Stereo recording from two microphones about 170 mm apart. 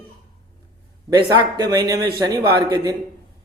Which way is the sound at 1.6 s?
20° right (ahead or behind).